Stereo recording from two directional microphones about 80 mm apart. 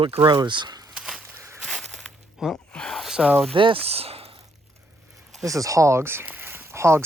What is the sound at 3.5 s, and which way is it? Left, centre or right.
Speech, right.